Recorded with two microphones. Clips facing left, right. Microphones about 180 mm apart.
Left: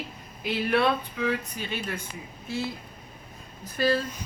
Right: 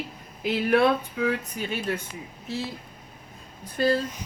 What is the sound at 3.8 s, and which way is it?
Speech, 20° right (ahead or behind).